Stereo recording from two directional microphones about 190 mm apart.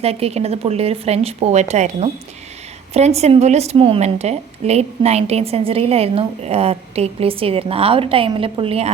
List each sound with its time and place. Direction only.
0.0 s a woman's voice: 35° right (ahead or behind)